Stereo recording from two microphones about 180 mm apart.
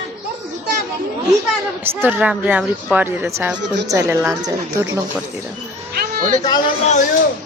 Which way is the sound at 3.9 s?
20° right (ahead or behind).